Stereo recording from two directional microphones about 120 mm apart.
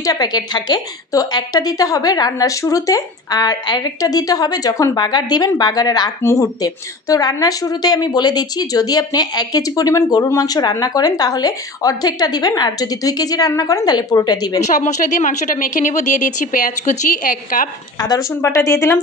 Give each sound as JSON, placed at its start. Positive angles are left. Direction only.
{"t": 0.0, "sound": "a woman's voice", "side_deg": 35}
{"t": 14.6, "sound": "a woman's voice", "side_deg": 85}
{"t": 17.9, "sound": "a woman's voice", "side_deg": 35}
{"t": 18.3, "sound": "speech", "side_deg": 20}